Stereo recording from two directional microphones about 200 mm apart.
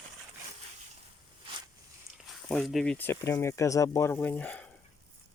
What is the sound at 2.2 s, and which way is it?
Speech, 5° left (ahead or behind).